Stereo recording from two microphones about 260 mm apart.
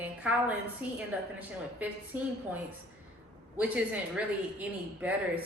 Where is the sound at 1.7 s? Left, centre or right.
Centre.